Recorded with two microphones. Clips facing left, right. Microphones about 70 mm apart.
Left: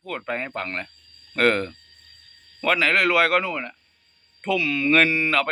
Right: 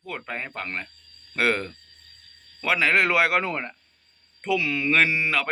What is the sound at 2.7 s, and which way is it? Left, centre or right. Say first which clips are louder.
Speech: left 1 dB; right.